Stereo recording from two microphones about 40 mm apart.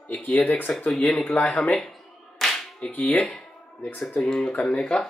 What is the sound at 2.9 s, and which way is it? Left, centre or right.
Speech, left.